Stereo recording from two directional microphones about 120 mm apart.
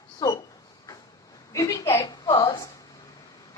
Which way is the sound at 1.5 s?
30° left (ahead or behind).